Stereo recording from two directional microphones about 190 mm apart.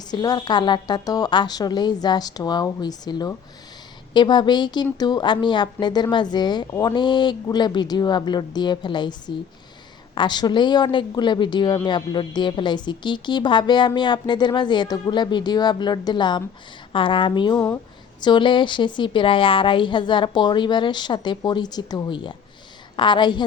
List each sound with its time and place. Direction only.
0.1 s a woman's voice: 20° left (ahead or behind)